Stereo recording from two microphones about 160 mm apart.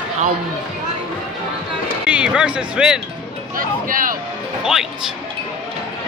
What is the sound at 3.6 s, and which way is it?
Speech, 60° right (ahead or behind).